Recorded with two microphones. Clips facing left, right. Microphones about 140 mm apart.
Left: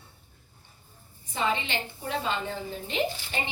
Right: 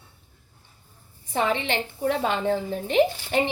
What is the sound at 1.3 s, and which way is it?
A woman's voice, 65° right (ahead or behind).